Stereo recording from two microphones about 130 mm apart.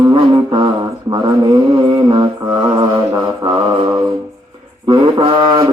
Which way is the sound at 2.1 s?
35° right (ahead or behind).